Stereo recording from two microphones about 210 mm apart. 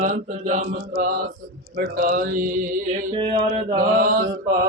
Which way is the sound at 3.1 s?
25° right (ahead or behind).